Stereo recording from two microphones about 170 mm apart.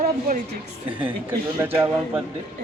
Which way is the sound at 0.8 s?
10° right (ahead or behind).